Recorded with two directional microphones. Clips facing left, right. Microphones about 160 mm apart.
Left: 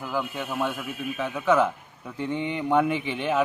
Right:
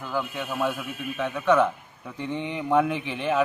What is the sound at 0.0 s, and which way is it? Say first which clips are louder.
A man's voice: even; 5° left (ahead or behind).